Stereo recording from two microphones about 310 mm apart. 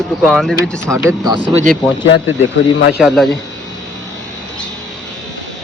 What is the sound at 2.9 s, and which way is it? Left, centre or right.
Speech, centre.